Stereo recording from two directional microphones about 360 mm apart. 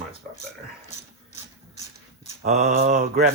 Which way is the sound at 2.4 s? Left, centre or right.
Right.